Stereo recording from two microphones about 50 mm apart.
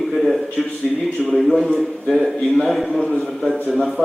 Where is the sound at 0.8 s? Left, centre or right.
Centre.